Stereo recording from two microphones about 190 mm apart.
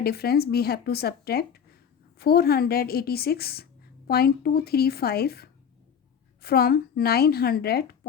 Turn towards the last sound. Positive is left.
turn(degrees=55)  # may be behind; listen again after turning